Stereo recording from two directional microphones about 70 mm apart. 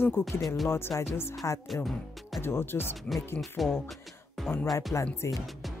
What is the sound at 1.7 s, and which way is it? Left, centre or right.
Speech, centre.